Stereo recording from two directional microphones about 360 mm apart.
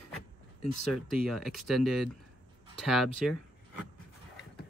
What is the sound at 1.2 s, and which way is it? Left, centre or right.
Speech, centre.